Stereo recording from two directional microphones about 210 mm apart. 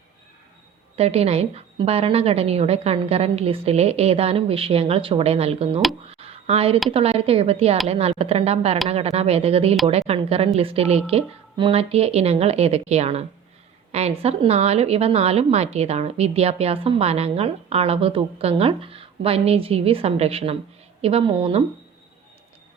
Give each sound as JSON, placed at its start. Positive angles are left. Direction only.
{"t": 0.9, "sound": "a woman's voice", "side_deg": -30}
{"t": 6.1, "sound": "a sound", "side_deg": -30}
{"t": 6.9, "sound": "a woman's voice", "side_deg": -30}